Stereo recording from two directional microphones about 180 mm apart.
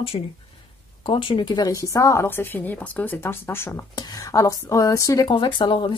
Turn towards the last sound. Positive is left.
turn(degrees=25)  # may be behind; listen again after turning